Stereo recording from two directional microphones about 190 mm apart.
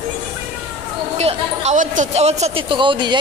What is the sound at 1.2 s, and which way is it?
Speech, 35° right (ahead or behind).